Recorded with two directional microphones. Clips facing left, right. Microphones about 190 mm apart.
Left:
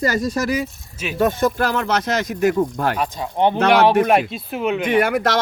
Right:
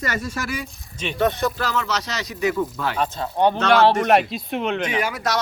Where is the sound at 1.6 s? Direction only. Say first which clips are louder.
Left 5 dB; 55° left (ahead or behind).